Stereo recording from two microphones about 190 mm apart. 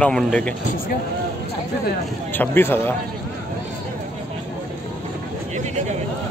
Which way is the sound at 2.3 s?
10° left (ahead or behind).